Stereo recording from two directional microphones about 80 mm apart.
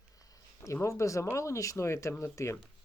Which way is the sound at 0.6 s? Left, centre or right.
Left.